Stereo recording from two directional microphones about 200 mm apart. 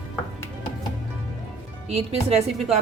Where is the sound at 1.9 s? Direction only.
30° right (ahead or behind).